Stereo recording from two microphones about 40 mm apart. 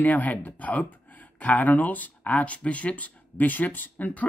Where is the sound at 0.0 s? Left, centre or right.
Left.